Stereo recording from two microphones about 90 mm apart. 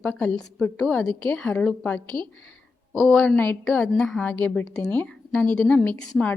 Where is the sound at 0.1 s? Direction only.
15° left (ahead or behind).